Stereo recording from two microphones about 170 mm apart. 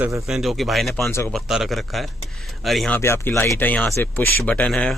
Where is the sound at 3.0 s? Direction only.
15° left (ahead or behind).